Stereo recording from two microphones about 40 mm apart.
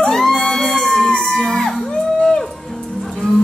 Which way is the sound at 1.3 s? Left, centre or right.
Centre.